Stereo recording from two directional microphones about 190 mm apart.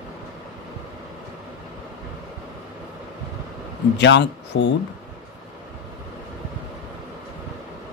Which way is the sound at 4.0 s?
65° left (ahead or behind).